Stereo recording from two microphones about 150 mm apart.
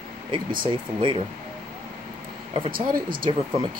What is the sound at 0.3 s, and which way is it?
Speech, 30° right (ahead or behind).